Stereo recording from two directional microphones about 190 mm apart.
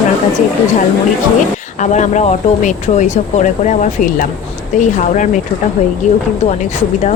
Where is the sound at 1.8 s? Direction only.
40° left (ahead or behind).